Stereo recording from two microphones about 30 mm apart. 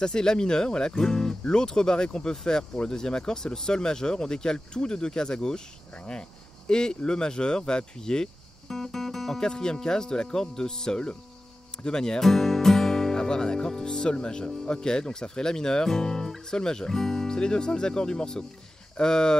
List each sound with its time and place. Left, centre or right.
0.0 s speech: left
0.9 s speech: centre
8.6 s music: centre
9.4 s speech: left
12.2 s speech: centre
17.4 s speech: left